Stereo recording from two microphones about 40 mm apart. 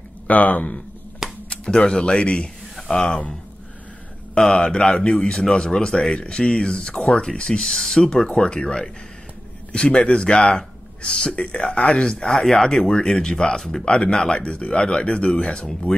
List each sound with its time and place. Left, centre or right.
0.3 s speech: left
1.5 s speech: left
4.4 s speech: left
8.0 s a man's voice: left
12.3 s speech: centre